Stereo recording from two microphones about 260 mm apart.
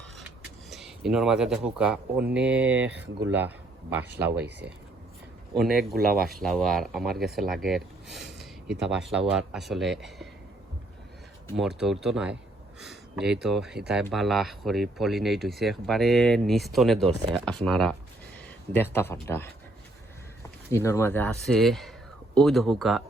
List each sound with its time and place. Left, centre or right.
0.7 s speech: centre
4.3 s speech: right
5.5 s speech: centre
11.5 s speech: centre
20.7 s speech: centre